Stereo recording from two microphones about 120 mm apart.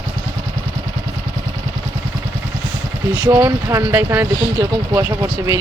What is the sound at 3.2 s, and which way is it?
Speech, 25° right (ahead or behind).